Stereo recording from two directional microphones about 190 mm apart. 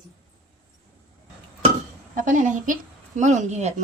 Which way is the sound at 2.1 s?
40° right (ahead or behind).